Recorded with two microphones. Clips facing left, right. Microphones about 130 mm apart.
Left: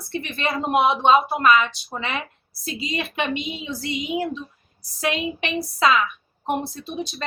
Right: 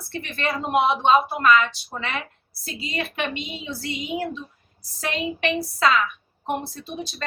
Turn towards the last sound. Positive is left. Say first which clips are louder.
# left 3 dB
turn(degrees=15)  # may be behind; listen again after turning